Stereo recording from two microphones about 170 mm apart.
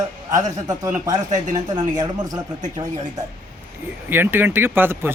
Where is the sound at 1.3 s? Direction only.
45° right (ahead or behind).